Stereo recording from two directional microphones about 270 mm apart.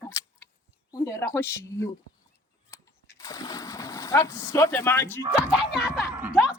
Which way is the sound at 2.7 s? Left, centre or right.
Centre.